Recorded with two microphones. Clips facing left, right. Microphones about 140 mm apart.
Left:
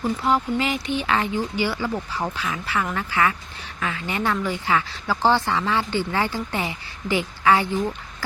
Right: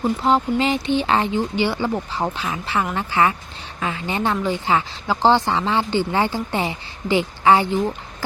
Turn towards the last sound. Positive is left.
turn(degrees=-25)  # may be behind; listen again after turning